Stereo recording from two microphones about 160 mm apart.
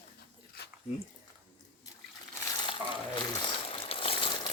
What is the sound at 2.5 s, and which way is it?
Frying, 30° left (ahead or behind).